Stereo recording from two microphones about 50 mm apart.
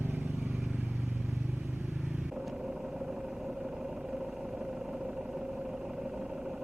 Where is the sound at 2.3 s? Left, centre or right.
Centre.